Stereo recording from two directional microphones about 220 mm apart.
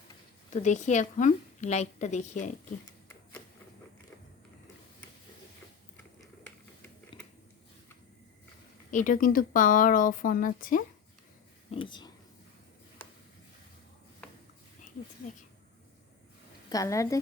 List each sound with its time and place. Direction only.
0.5 s speech: 35° left (ahead or behind)
8.9 s speech: 35° left (ahead or behind)
11.7 s speech: 20° left (ahead or behind)
13.0 s a sound: 10° left (ahead or behind)
16.6 s a woman's voice: 15° left (ahead or behind)